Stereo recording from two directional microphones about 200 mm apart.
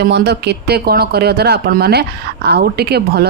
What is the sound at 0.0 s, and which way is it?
Speech, 55° right (ahead or behind).